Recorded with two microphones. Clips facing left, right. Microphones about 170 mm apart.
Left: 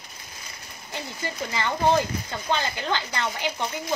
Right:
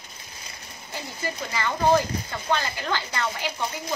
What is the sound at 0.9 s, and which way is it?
Speech, 25° left (ahead or behind).